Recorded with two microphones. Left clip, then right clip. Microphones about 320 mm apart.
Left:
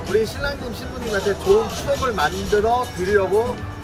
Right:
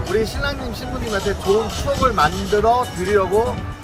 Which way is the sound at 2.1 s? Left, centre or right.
Centre.